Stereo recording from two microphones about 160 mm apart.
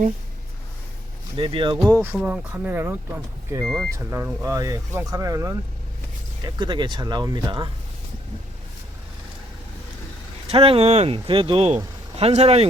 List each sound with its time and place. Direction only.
1.4 s speech: 30° right (ahead or behind)
1.8 s speech: 15° right (ahead or behind)
3.6 s speech: centre (ahead or behind)
3.9 s speech: 15° right (ahead or behind)
10.5 s speech: 35° right (ahead or behind)